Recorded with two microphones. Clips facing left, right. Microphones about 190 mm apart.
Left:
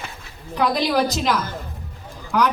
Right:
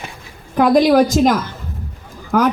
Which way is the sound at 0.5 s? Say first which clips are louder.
Right 9 dB; 50° right (ahead or behind).